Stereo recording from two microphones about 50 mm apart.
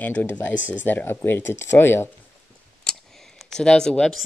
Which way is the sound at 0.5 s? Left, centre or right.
Right.